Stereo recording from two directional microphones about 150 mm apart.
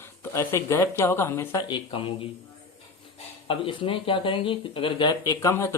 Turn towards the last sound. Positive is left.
turn(degrees=20)  # may be behind; listen again after turning